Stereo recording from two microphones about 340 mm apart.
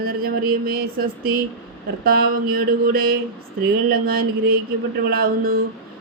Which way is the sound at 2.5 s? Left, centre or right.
Right.